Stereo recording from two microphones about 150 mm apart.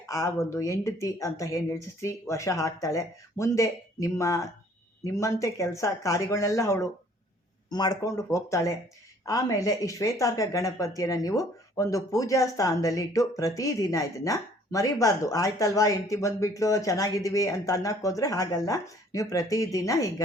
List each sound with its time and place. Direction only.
0.0 s speech: 20° left (ahead or behind)